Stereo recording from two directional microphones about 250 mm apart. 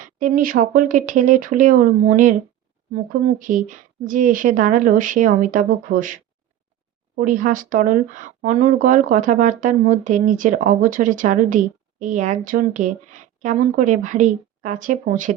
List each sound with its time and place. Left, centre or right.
0.2 s speech: right
7.2 s a woman's voice: right